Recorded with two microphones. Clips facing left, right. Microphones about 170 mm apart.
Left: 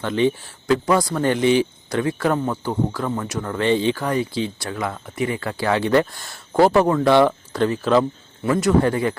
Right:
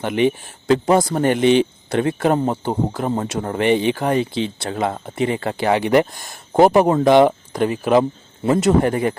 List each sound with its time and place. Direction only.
0.0 s speech: 15° right (ahead or behind)